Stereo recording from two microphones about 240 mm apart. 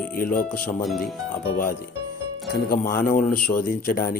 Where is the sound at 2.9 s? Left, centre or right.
Left.